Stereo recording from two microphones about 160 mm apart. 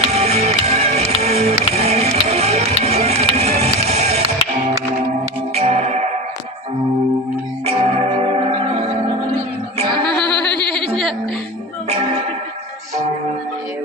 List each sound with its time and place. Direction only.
0.1 s music: 40° right (ahead or behind)
5.5 s music: 40° right (ahead or behind)
7.6 s music: 40° right (ahead or behind)
9.9 s music: 30° right (ahead or behind)